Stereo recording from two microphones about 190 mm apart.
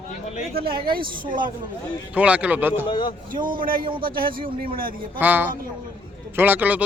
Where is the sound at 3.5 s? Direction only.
45° right (ahead or behind).